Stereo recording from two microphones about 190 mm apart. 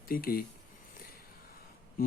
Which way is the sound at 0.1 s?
50° left (ahead or behind).